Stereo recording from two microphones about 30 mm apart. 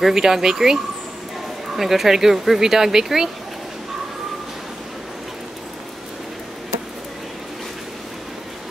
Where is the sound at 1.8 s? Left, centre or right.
Centre.